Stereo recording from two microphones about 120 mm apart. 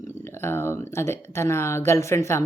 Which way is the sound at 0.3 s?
20° left (ahead or behind).